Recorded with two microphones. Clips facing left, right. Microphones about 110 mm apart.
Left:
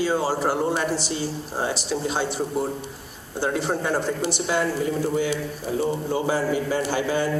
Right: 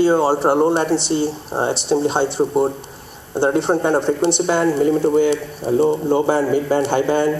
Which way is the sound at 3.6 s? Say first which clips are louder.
Right 6 dB; 25° right (ahead or behind).